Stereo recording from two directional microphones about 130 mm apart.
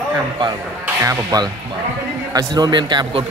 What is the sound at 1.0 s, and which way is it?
A man's voice, 25° right (ahead or behind).